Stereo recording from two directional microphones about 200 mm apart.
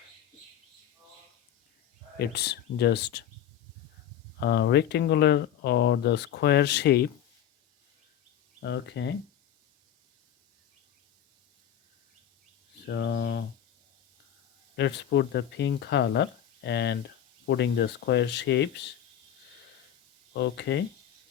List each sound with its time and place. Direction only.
2.1 s speech: 55° left (ahead or behind)
4.4 s speech: 55° left (ahead or behind)
8.6 s speech: 60° left (ahead or behind)
12.8 s speech: 60° left (ahead or behind)
14.8 s speech: 60° left (ahead or behind)
20.3 s speech: 60° left (ahead or behind)